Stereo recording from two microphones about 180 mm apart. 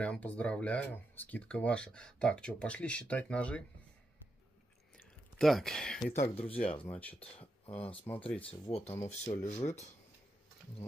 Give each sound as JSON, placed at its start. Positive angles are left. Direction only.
{"t": 0.0, "sound": "speech", "side_deg": 5}
{"t": 4.9, "sound": "a sound", "side_deg": 0}
{"t": 6.1, "sound": "speech", "side_deg": 35}
{"t": 6.8, "sound": "speech", "side_deg": 10}
{"t": 7.6, "sound": "speech", "side_deg": 30}